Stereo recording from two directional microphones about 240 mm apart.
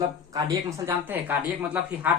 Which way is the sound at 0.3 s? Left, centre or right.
Centre.